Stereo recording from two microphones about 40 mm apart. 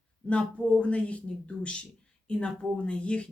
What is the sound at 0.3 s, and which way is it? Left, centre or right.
Speech, left.